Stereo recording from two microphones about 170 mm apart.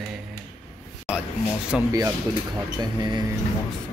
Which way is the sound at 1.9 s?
20° right (ahead or behind).